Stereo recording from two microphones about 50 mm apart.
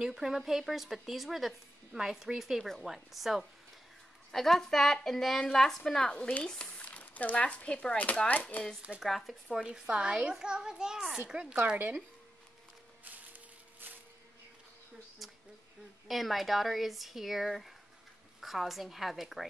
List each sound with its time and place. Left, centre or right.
0.0 s a child's voice: centre
2.6 s a woman's voice: centre
8.3 s speech: left
9.0 s speech: centre
9.5 s a child's voice: centre
13.0 s music: right
16.1 s speech: centre